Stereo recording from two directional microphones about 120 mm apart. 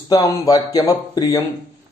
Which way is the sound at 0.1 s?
30° left (ahead or behind).